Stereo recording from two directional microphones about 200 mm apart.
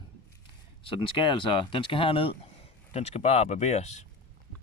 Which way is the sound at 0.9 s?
25° left (ahead or behind).